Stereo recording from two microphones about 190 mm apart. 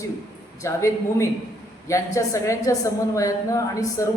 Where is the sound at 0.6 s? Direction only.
15° left (ahead or behind).